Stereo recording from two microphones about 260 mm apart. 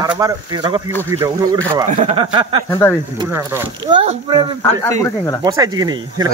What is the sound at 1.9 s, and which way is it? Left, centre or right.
Speech, right.